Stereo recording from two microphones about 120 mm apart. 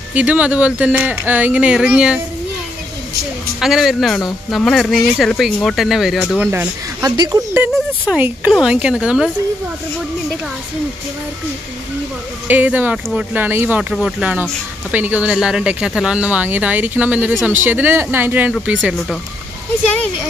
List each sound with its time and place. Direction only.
0.1 s speech: 10° right (ahead or behind)
3.6 s speech: centre (ahead or behind)
6.4 s speech: 15° right (ahead or behind)
7.0 s speech: 30° right (ahead or behind)
8.1 s speech: 10° right (ahead or behind)
12.4 s speech: 15° right (ahead or behind)